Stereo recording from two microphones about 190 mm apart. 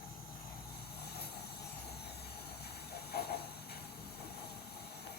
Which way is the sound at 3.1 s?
55° left (ahead or behind).